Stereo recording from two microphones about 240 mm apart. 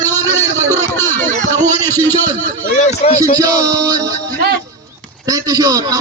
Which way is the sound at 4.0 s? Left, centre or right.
Right.